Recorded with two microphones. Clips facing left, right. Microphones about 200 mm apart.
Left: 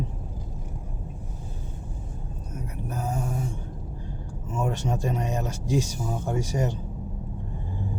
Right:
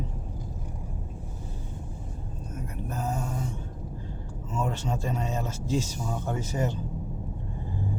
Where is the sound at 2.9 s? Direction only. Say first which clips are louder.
Left 1 dB; 10° left (ahead or behind).